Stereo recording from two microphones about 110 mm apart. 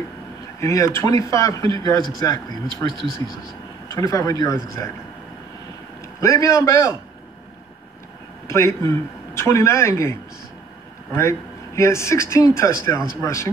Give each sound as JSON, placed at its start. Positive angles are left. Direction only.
{"t": 0.6, "sound": "a man's voice", "side_deg": 30}
{"t": 2.9, "sound": "speech", "side_deg": -50}
{"t": 3.9, "sound": "a man's voice", "side_deg": 30}
{"t": 6.2, "sound": "a man's voice", "side_deg": 30}
{"t": 8.5, "sound": "a man's voice", "side_deg": 25}
{"t": 11.1, "sound": "a man's voice", "side_deg": 25}